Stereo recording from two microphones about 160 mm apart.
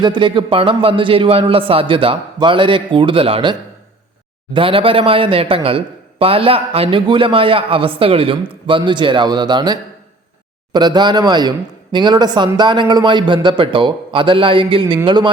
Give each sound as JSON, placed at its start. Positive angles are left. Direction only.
{"t": 0.0, "sound": "speech", "side_deg": -30}
{"t": 4.5, "sound": "speech", "side_deg": -35}